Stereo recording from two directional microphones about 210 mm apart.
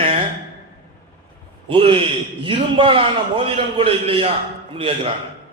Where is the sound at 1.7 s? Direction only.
25° right (ahead or behind).